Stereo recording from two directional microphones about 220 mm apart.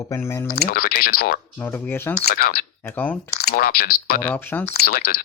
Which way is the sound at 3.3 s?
45° left (ahead or behind).